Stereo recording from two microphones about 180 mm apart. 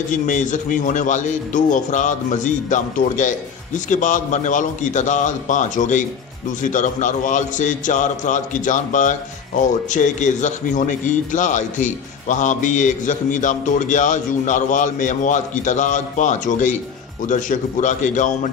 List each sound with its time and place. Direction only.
0.1 s a man's voice: 45° left (ahead or behind)